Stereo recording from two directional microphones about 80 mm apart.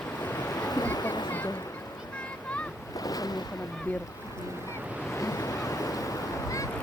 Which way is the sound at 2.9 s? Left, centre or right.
Left.